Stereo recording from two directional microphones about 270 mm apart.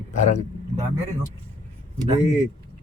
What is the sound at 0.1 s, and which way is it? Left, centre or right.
Speech, left.